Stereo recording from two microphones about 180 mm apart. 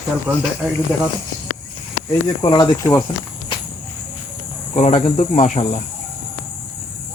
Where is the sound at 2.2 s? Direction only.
25° left (ahead or behind).